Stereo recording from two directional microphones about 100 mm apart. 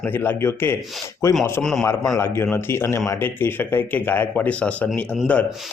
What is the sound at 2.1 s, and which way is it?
Speech, 25° left (ahead or behind).